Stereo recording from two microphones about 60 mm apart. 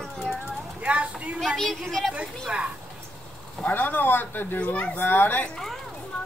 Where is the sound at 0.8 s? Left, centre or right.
Right.